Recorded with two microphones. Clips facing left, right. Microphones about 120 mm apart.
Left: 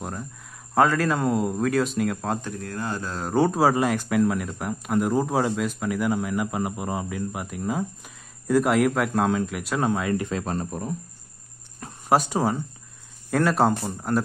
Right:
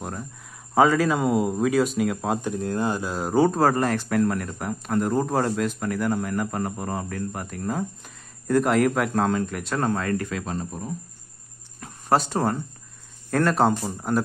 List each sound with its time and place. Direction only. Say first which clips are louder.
0.0 s a sound: even; centre (ahead or behind)
0.7 s speech: right 2 dB; centre (ahead or behind)
2.5 s speech: right 5 dB; 20° right (ahead or behind); by 10.3 s 15° left (ahead or behind)
10.4 s speech: left 2 dB; 50° left (ahead or behind)
12.1 s speech: even; 10° left (ahead or behind)